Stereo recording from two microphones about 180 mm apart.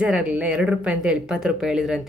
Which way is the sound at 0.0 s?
5° right (ahead or behind).